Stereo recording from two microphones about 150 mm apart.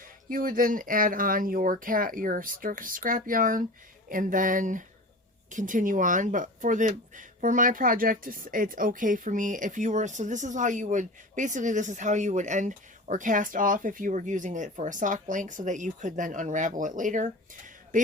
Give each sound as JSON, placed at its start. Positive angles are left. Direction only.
{"t": 0.0, "sound": "speech", "side_deg": -65}